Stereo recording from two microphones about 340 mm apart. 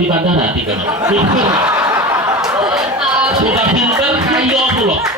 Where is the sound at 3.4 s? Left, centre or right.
Centre.